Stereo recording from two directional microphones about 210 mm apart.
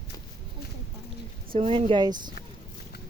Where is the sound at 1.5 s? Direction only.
25° right (ahead or behind).